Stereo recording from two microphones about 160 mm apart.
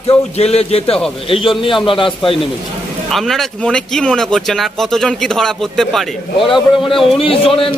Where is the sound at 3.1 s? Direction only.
Centre (ahead or behind).